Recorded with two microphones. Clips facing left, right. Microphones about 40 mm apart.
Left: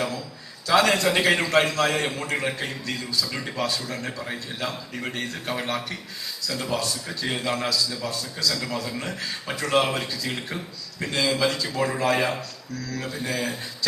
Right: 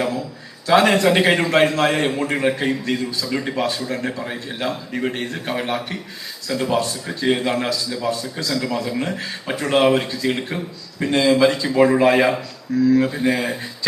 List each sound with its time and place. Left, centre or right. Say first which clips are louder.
0.7 s a man's voice: right 5 dB; right
3.2 s speech: right 8 dB; right
3.5 s a man's voice: right 5 dB; right